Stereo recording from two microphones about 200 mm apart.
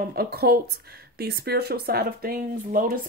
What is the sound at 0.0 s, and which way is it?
Speech, 50° right (ahead or behind).